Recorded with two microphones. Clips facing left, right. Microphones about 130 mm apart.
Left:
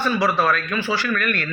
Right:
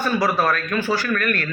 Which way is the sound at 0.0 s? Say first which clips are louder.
Even; 45° right (ahead or behind).